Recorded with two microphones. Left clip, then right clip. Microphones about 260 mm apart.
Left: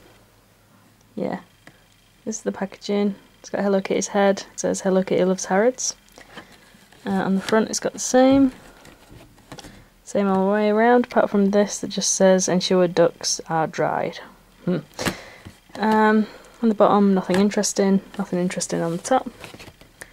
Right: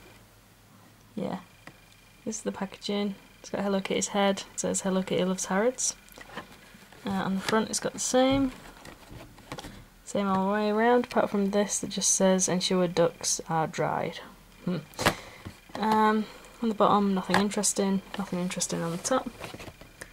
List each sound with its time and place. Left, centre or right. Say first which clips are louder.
1.1 s speech: left 7 dB; centre
2.3 s speech: left 7 dB; centre
9.5 s vehicle: left 1 dB; centre
10.5 s speech: left 7 dB; centre
14.7 s a sound: left 2 dB; centre
16.8 s speech: left 6 dB; centre